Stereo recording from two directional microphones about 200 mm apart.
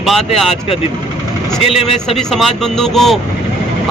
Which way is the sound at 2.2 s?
Centre (ahead or behind).